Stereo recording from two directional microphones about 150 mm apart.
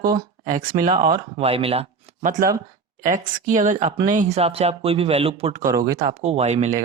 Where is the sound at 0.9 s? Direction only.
35° right (ahead or behind).